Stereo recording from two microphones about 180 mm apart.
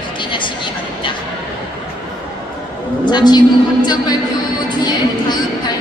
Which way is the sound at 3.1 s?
25° left (ahead or behind).